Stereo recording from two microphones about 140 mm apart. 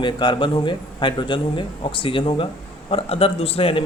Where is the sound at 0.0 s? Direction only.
35° left (ahead or behind).